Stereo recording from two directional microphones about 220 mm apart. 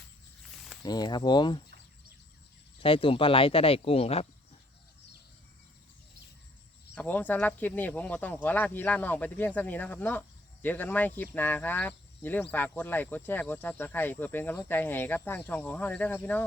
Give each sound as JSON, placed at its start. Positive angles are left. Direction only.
{"t": 0.8, "sound": "speech", "side_deg": 20}
{"t": 2.7, "sound": "speech", "side_deg": 25}
{"t": 6.9, "sound": "speech", "side_deg": 5}